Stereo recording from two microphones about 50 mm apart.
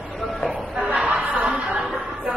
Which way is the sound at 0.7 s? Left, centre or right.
Right.